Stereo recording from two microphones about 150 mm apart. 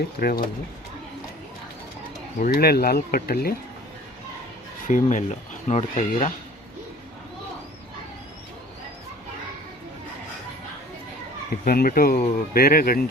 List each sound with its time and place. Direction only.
0.2 s speech: 80° left
2.4 s speech: 90° left
4.9 s speech: 55° left (ahead or behind)
11.6 s speech: 75° left (ahead or behind)